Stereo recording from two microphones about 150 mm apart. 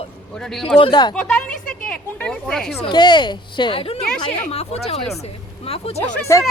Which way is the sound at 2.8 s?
30° left (ahead or behind).